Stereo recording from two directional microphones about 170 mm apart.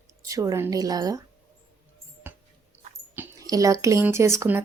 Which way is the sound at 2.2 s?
10° right (ahead or behind).